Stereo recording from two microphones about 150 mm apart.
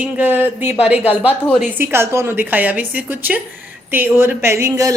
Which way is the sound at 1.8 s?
15° right (ahead or behind).